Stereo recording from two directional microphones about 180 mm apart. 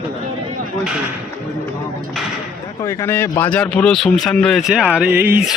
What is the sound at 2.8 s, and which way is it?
A man's voice, 15° left (ahead or behind).